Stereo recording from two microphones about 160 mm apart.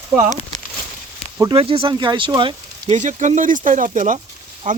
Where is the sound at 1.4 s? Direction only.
35° right (ahead or behind); by 4.2 s 50° right (ahead or behind).